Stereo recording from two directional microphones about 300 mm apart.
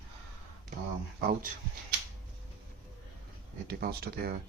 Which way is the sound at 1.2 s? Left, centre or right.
Right.